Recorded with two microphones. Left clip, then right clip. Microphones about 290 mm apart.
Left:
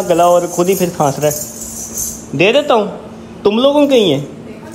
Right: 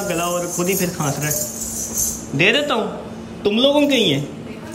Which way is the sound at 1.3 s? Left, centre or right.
Centre.